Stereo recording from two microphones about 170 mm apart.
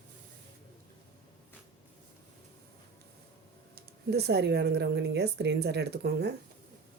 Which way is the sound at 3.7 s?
70° right (ahead or behind).